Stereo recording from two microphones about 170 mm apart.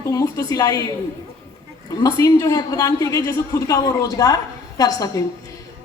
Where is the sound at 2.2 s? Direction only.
20° left (ahead or behind).